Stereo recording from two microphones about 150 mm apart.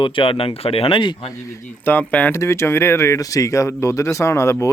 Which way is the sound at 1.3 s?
15° left (ahead or behind).